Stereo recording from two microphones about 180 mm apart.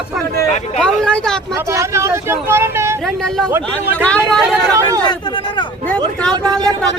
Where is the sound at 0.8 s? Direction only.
5° left (ahead or behind).